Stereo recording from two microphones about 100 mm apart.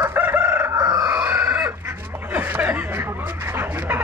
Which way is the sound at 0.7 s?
35° right (ahead or behind).